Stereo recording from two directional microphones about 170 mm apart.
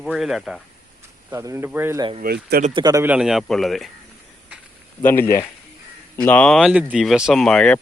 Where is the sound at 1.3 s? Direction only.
15° right (ahead or behind).